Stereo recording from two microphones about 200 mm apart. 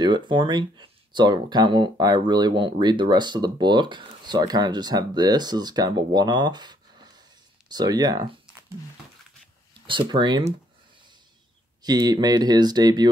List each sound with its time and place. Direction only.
0.0 s speech: 25° right (ahead or behind)
9.8 s speech: 25° right (ahead or behind)
11.8 s speech: 20° right (ahead or behind)